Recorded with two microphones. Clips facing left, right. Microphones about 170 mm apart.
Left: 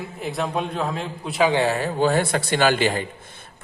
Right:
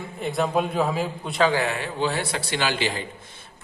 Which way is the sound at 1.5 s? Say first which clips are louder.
Left 4 dB; 30° left (ahead or behind).